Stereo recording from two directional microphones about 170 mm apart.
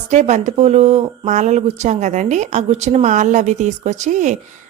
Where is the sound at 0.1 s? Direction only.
45° right (ahead or behind).